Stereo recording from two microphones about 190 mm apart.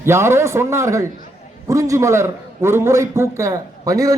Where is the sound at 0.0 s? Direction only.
15° right (ahead or behind).